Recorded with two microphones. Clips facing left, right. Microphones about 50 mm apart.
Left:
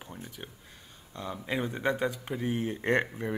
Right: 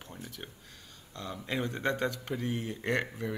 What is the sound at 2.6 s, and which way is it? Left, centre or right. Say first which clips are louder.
Speech: left 8 dB; left.